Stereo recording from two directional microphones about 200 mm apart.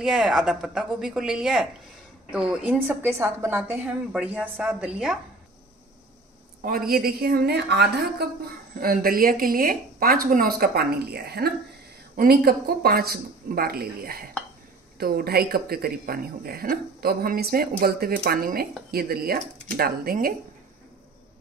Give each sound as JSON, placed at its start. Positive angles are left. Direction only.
{"t": 0.0, "sound": "a woman's voice", "side_deg": -5}
{"t": 6.6, "sound": "speech", "side_deg": -50}